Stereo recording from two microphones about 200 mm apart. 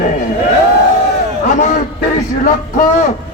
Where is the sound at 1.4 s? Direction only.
35° left (ahead or behind).